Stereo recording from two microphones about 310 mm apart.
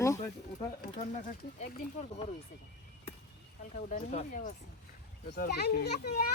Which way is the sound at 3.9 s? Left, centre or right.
Left.